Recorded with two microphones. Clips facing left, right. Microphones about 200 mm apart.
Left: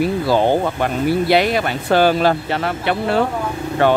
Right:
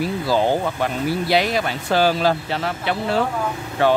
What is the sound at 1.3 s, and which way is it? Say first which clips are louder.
Speech: left 4 dB; 60° left (ahead or behind).